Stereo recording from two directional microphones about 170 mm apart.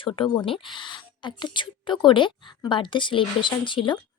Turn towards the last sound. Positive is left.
turn(degrees=30)  # may be behind; listen again after turning